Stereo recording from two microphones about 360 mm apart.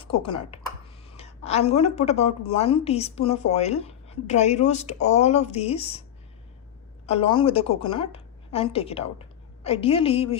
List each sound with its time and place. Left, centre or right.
0.0 s a woman's voice: centre
7.1 s a woman's voice: centre